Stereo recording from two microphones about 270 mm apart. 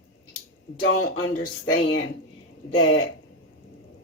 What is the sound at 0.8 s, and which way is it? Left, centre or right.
Speech, left.